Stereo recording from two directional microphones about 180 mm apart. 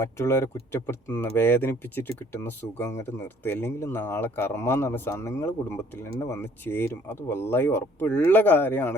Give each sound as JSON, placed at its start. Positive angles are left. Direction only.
{"t": 0.0, "sound": "speech", "side_deg": 15}